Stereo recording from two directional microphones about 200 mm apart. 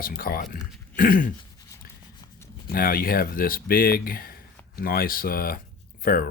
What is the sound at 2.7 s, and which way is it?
Speech, 50° left (ahead or behind).